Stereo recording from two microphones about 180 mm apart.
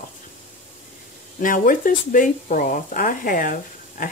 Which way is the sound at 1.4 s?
50° left (ahead or behind).